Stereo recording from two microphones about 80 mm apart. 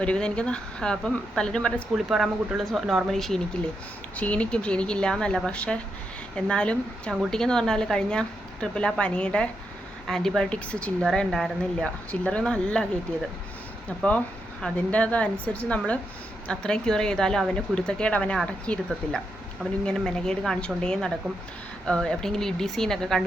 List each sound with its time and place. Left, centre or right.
0.0 s speech: centre
2.0 s speech: centre
4.2 s speech: centre
10.7 s speech: centre
11.0 s speech: centre
14.6 s speech: centre